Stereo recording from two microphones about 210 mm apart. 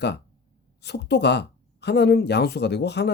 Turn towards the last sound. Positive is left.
turn(degrees=55)  # may be behind; listen again after turning